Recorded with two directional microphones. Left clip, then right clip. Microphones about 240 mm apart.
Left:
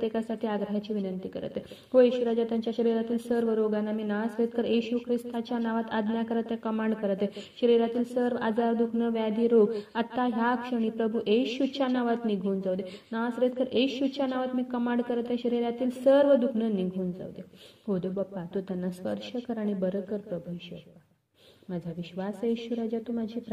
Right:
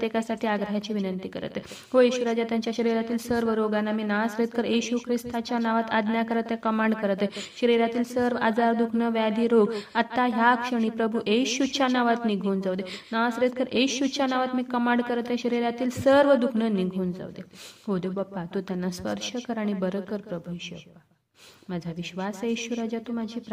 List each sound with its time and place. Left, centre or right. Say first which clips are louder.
0.0 s a woman's voice: right 3 dB; right
21.7 s a woman's voice: right 3 dB; right